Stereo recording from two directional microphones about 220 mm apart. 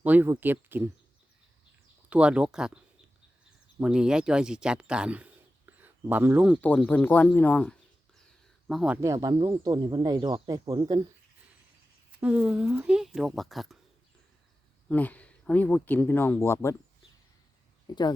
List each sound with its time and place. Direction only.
0.0 s speech: 10° right (ahead or behind)
2.0 s speech: 5° right (ahead or behind)
3.8 s speech: 5° right (ahead or behind)
6.6 s speech: 5° left (ahead or behind)
9.0 s speech: 15° right (ahead or behind)
12.2 s speech: 5° right (ahead or behind)
14.8 s speech: 5° left (ahead or behind)
17.8 s speech: 20° left (ahead or behind)